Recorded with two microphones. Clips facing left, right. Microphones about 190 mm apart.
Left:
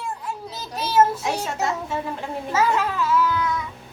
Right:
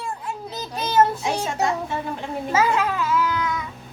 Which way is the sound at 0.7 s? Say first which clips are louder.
Even; 5° left (ahead or behind).